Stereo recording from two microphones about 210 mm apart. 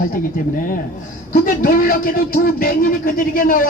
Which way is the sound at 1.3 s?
40° left (ahead or behind).